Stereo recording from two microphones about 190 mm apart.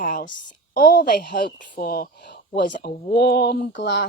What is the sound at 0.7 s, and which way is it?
Speech, 50° left (ahead or behind).